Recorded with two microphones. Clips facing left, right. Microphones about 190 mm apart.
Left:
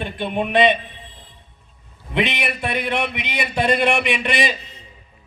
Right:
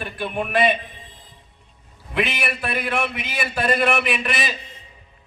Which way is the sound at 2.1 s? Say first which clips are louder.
Left 2 dB; 25° left (ahead or behind).